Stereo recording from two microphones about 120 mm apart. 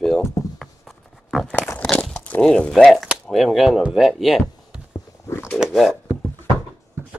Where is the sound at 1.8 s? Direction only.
5° left (ahead or behind).